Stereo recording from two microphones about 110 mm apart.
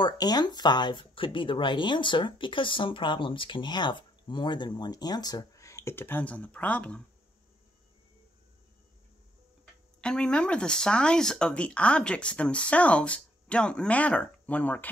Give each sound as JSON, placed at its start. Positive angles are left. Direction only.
{"t": 0.0, "sound": "speech", "side_deg": 40}
{"t": 10.0, "sound": "speech", "side_deg": 10}